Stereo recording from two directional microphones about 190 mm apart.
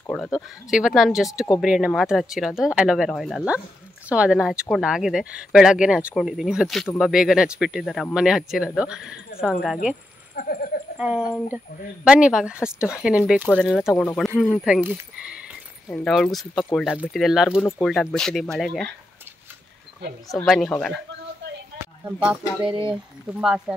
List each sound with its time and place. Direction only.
0.0 s speech: 5° left (ahead or behind)
10.3 s a sound: 50° left (ahead or behind)
11.0 s speech: 5° right (ahead or behind)
15.9 s speech: 5° left (ahead or behind)
20.4 s speech: centre (ahead or behind)
22.0 s speech: 5° right (ahead or behind)
22.7 s speech: 25° right (ahead or behind)
23.3 s speech: 5° right (ahead or behind)